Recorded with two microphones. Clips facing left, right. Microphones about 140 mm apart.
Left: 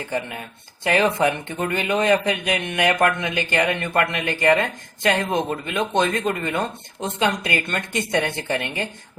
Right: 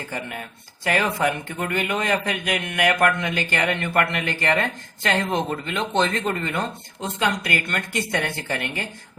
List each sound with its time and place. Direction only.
0.9 s a man's voice: 20° left (ahead or behind)